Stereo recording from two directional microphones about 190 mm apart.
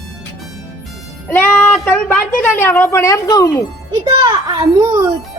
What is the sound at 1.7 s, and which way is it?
A woman's voice, 5° left (ahead or behind).